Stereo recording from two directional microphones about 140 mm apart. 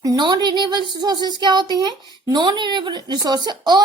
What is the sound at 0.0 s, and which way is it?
A woman's voice, 30° right (ahead or behind).